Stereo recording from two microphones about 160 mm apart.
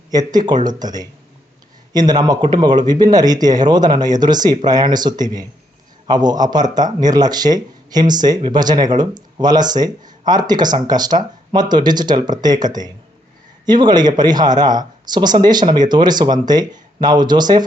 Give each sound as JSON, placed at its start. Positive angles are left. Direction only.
{"t": 0.1, "sound": "a man's voice", "side_deg": -25}